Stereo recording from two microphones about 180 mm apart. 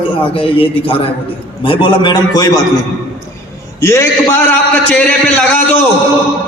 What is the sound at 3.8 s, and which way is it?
A man's voice, 15° left (ahead or behind).